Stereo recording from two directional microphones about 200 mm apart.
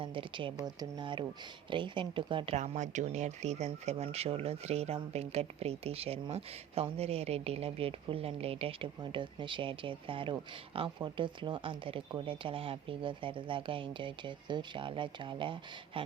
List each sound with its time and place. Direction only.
0.0 s speech: 25° right (ahead or behind)
2.6 s speech: 35° right (ahead or behind)
15.9 s a sound: 25° right (ahead or behind)